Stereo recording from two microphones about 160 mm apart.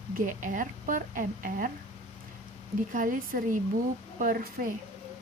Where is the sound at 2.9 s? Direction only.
55° right (ahead or behind).